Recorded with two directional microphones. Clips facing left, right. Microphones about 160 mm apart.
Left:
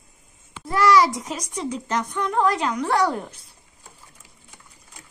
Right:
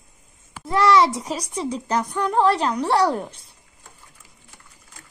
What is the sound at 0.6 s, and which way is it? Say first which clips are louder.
A child's voice: right 1 dB; 25° right (ahead or behind).